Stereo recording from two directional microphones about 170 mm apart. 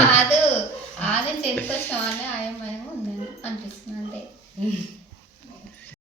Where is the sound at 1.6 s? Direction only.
10° left (ahead or behind).